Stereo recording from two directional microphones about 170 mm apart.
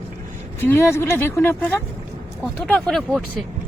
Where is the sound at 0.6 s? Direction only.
15° left (ahead or behind).